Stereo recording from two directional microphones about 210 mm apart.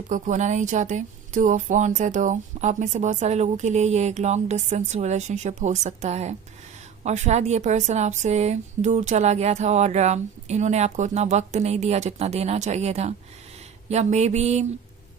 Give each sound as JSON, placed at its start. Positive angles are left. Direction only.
{"t": 0.1, "sound": "a woman's voice", "side_deg": -35}